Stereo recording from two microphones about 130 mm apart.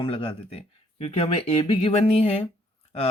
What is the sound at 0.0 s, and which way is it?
Speech, 45° left (ahead or behind).